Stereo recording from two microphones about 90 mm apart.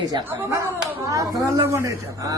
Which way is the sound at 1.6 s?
30° right (ahead or behind).